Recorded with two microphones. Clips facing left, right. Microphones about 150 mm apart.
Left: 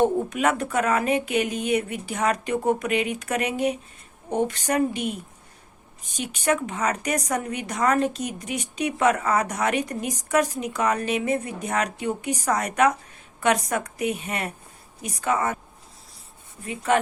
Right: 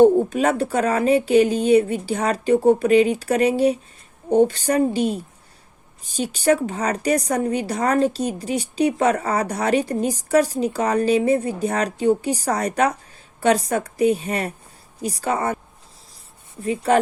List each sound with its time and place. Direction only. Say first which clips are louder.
0.0 s a woman's voice: right 7 dB; 30° right (ahead or behind)
16.6 s a woman's voice: right 4 dB; 35° right (ahead or behind)